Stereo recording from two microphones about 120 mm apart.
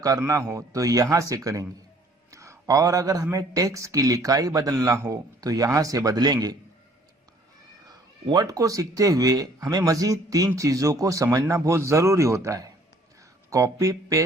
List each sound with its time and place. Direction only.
0.0 s speech: 30° right (ahead or behind)
2.3 s a sound: 25° right (ahead or behind)
3.3 s speech: 30° right (ahead or behind)
7.9 s speech: 35° right (ahead or behind)